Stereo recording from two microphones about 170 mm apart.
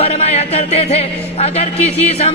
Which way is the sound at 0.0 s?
40° left (ahead or behind).